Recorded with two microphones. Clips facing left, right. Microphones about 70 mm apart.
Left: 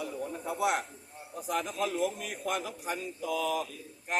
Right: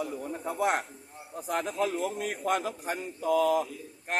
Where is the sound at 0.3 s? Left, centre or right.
Right.